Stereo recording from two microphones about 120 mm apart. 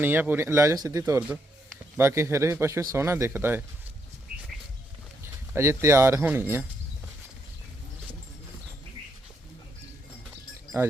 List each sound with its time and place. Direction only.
0.0 s speech: 15° right (ahead or behind)
5.2 s speech: 20° right (ahead or behind)